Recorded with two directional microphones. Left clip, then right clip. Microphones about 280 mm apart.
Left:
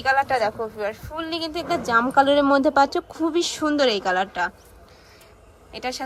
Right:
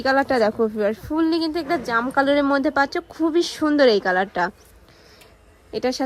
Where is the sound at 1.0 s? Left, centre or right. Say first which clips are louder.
Right 7 dB; right.